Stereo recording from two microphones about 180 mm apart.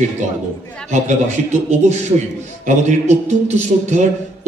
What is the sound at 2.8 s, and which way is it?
A man's voice, 40° right (ahead or behind).